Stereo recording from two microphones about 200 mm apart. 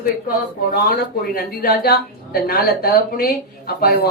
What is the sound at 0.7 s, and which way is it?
Speech, 45° left (ahead or behind).